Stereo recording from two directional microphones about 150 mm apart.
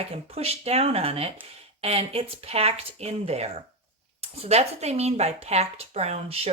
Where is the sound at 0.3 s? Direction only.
40° right (ahead or behind).